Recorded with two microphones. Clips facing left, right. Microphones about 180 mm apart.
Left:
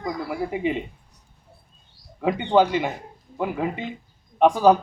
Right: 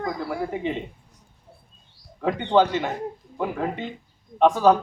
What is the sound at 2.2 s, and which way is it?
A man's voice, 10° left (ahead or behind).